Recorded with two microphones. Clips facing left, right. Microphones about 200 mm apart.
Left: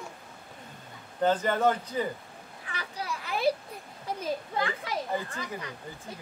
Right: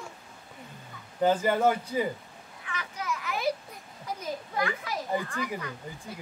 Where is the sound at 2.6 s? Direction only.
35° left (ahead or behind).